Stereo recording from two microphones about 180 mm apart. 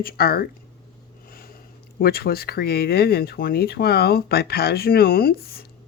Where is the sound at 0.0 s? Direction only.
55° left (ahead or behind).